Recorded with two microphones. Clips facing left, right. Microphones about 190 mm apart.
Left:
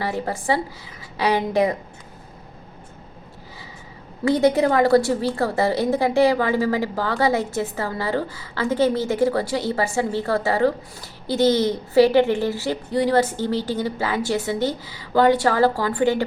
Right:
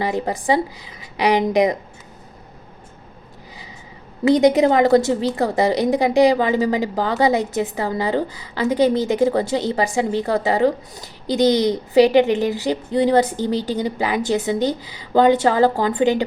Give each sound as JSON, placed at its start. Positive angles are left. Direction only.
{"t": 0.0, "sound": "a woman's voice", "side_deg": -15}
{"t": 4.3, "sound": "a woman's voice", "side_deg": -15}